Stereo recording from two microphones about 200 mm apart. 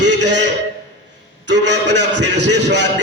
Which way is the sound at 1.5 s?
60° right (ahead or behind).